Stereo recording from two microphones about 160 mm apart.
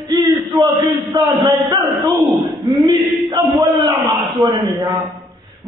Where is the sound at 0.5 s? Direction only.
5° left (ahead or behind).